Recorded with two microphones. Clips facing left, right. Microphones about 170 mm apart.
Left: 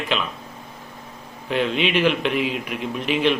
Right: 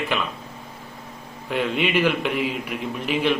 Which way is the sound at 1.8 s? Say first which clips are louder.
Even; 10° right (ahead or behind).